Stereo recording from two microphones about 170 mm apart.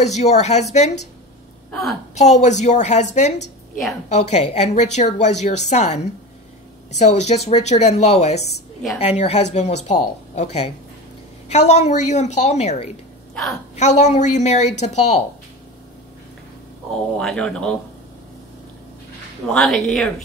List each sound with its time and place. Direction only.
0.0 s a woman's voice: 40° left (ahead or behind)
1.7 s a woman's voice: centre (ahead or behind)
2.1 s a woman's voice: 40° left (ahead or behind)
13.3 s a woman's voice: centre (ahead or behind)
13.7 s a woman's voice: 45° left (ahead or behind)
17.2 s speech: 5° left (ahead or behind)
19.4 s speech: 5° left (ahead or behind)